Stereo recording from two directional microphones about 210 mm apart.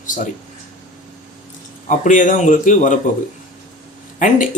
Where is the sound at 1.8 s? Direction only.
35° left (ahead or behind).